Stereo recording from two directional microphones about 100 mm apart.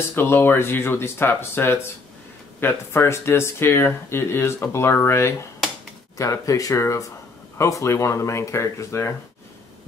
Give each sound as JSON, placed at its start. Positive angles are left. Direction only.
{"t": 0.1, "sound": "speech", "side_deg": 20}